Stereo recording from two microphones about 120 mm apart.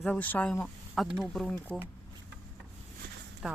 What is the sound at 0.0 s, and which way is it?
Speech, 10° left (ahead or behind).